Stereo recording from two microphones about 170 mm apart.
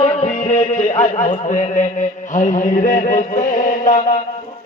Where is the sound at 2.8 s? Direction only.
45° left (ahead or behind).